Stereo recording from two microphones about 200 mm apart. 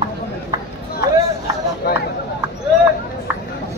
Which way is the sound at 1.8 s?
55° left (ahead or behind).